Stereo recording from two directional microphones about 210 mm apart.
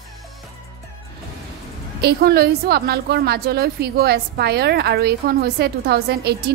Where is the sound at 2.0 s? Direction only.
50° right (ahead or behind).